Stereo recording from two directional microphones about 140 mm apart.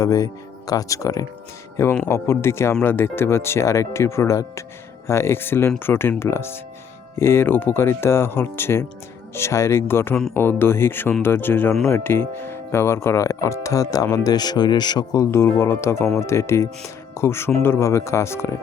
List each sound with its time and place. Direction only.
0.0 s speech: 25° left (ahead or behind)